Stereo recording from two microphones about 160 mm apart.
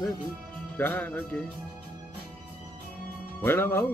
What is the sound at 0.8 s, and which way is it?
Music, 10° left (ahead or behind).